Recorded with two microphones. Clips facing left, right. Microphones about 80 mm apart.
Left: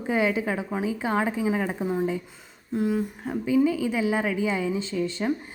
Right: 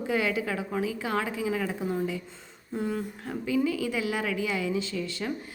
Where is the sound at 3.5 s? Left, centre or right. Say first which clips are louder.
Left 5 dB; left.